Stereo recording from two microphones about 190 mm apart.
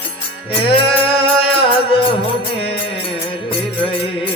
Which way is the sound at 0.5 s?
30° left (ahead or behind).